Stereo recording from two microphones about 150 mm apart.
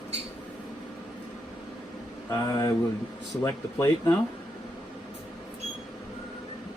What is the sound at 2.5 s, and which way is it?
Speech, 25° left (ahead or behind).